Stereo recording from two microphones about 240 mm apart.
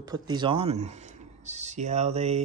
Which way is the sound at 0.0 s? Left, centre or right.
Centre.